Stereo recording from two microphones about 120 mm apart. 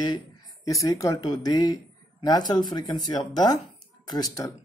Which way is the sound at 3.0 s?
35° left (ahead or behind).